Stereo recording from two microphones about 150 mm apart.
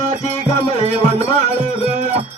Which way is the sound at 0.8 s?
45° right (ahead or behind).